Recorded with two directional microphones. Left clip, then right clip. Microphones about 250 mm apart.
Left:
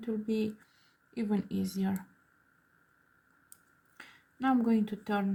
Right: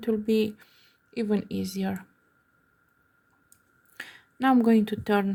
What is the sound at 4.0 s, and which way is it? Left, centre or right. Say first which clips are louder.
Speech: right 8 dB; right.